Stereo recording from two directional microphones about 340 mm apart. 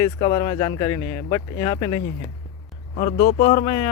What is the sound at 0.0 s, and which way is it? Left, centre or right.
Speech, centre.